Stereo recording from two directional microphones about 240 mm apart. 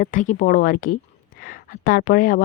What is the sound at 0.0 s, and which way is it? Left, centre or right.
Speech, left.